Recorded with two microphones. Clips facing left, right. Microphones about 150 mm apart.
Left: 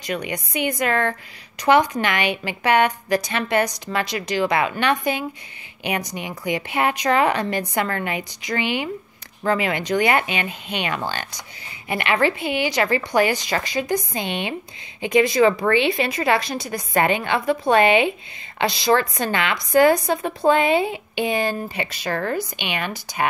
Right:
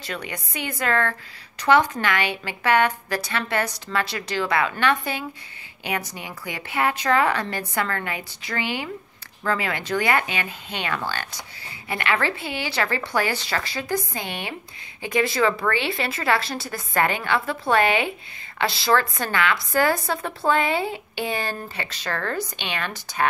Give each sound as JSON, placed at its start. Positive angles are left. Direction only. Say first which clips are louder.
{"t": 0.0, "sound": "a woman's voice", "louder": "left 6 dB", "side_deg": 15}